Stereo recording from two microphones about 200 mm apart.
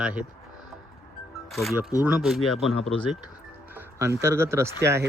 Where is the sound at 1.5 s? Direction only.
Centre (ahead or behind).